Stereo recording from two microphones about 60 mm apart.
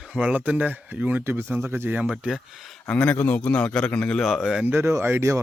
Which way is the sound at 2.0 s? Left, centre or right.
Centre.